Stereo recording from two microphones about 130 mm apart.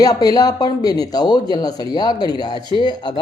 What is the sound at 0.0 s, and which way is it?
Speech, 30° left (ahead or behind).